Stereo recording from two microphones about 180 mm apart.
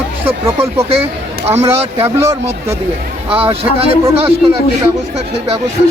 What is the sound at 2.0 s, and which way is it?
Speech, 15° right (ahead or behind).